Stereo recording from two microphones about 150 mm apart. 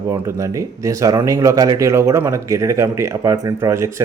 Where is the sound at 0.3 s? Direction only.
20° right (ahead or behind).